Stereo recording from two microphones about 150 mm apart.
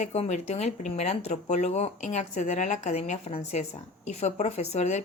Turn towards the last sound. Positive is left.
turn(degrees=50)  # may be behind; listen again after turning